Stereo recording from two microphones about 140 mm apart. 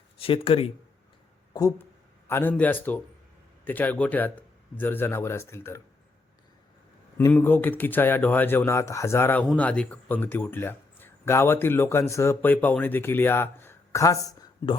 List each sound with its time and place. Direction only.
0.2 s speech: 40° left (ahead or behind)
1.8 s speech: 15° left (ahead or behind)
7.2 s speech: 15° left (ahead or behind)